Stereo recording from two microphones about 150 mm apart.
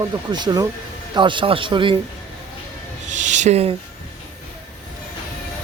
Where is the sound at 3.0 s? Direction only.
55° right (ahead or behind).